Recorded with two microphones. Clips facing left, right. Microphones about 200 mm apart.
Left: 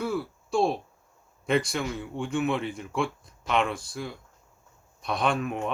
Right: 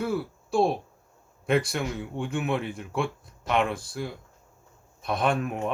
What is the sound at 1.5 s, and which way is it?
Speech, 55° right (ahead or behind).